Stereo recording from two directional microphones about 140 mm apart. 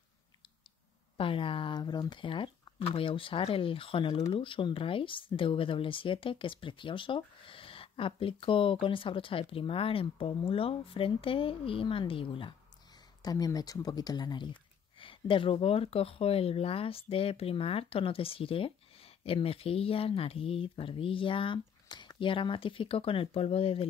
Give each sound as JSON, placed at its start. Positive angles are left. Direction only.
{"t": 1.1, "sound": "speech", "side_deg": 40}
{"t": 13.2, "sound": "speech", "side_deg": 25}